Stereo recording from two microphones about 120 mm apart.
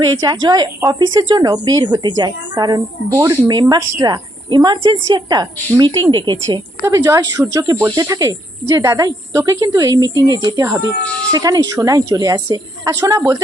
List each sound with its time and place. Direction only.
0.0 s a woman's voice: 35° right (ahead or behind)
6.8 s a woman's voice: 25° right (ahead or behind)